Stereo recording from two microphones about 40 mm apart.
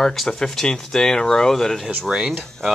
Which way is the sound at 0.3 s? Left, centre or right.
Centre.